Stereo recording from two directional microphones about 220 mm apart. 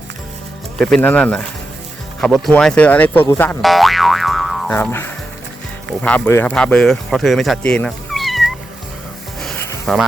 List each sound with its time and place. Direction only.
0.8 s speech: centre (ahead or behind)
9.4 s music: centre (ahead or behind)